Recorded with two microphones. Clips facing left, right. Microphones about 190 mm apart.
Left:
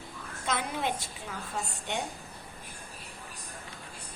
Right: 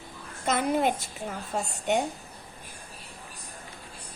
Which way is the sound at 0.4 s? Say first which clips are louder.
Right 7 dB; 45° right (ahead or behind).